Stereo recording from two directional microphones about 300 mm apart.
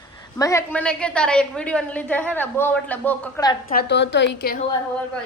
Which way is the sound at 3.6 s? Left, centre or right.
Left.